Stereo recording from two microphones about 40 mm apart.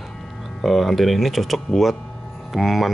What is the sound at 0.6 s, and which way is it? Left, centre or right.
Speech, centre.